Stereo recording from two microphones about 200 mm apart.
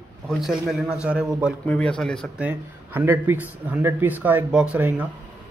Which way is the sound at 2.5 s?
10° right (ahead or behind).